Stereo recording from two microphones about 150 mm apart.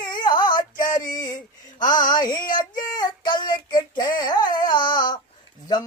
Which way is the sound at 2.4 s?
65° left (ahead or behind).